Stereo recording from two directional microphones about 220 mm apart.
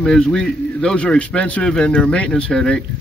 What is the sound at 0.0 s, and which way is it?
Speech, 5° left (ahead or behind).